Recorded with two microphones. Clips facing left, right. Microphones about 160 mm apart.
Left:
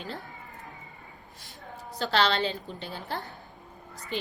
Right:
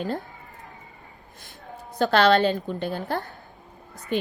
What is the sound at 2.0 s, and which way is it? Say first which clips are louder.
A woman's voice: right 8 dB; 50° right (ahead or behind).